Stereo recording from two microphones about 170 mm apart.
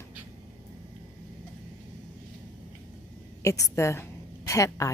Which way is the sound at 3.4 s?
15° left (ahead or behind).